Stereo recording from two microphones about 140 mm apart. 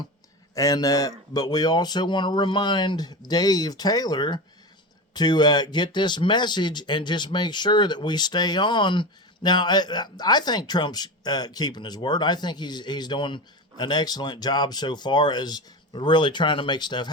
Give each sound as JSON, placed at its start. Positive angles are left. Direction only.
{"t": 0.5, "sound": "speech", "side_deg": 25}